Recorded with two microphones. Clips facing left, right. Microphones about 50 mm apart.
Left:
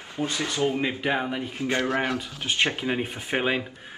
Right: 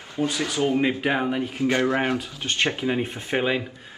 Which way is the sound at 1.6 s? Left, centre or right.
Right.